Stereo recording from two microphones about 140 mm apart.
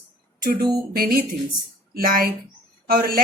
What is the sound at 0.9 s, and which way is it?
Speech, 90° right.